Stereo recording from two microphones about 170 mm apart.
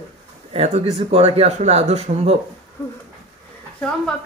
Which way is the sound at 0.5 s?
40° right (ahead or behind).